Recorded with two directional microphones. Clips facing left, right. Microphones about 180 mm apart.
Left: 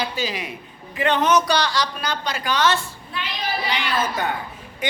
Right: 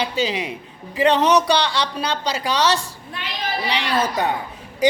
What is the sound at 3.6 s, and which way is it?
Speech, 30° right (ahead or behind).